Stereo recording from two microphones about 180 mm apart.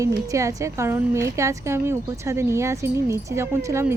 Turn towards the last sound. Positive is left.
turn(degrees=-15)  # may be behind; listen again after turning